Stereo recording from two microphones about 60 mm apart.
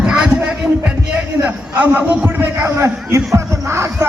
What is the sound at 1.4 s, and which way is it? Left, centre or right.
A man's voice, right.